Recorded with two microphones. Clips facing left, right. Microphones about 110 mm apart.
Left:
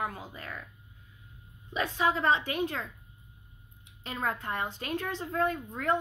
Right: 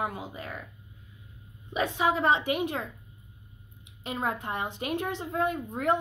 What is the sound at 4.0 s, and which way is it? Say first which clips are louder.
A woman's voice: right 2 dB; 15° right (ahead or behind).